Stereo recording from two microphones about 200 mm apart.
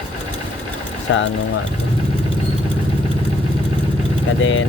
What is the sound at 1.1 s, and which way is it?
Speech, 65° left (ahead or behind).